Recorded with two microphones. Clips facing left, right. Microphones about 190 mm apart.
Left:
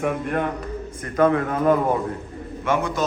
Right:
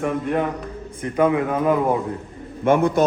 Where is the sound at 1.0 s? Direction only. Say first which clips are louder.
Even; 10° right (ahead or behind).